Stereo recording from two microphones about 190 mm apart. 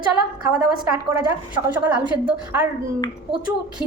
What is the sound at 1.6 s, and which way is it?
Speech, 10° right (ahead or behind).